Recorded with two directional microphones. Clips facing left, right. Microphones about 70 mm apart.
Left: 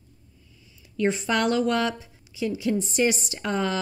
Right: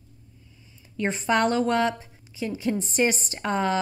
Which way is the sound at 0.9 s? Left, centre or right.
Right.